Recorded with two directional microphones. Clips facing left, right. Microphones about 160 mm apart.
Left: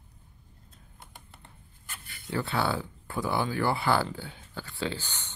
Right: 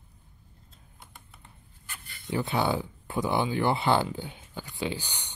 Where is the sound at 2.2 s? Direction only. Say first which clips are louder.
Right 2 dB; 20° right (ahead or behind).